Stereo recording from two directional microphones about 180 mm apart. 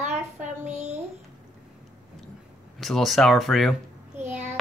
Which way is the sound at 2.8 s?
Centre (ahead or behind).